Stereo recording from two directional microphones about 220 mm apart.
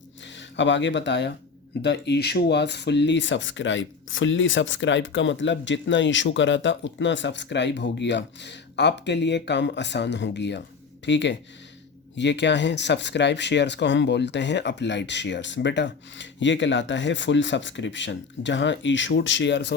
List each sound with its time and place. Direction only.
0.3 s speech: 55° left (ahead or behind)